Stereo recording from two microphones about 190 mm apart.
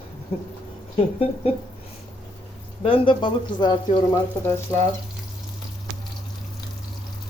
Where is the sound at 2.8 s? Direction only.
25° left (ahead or behind).